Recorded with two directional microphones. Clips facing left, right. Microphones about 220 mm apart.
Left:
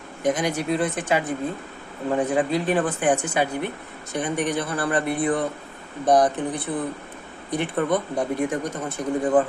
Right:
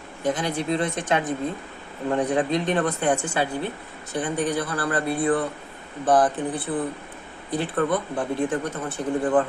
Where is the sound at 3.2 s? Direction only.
20° left (ahead or behind).